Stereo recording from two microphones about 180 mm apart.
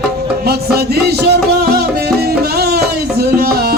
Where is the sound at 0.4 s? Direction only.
60° right (ahead or behind).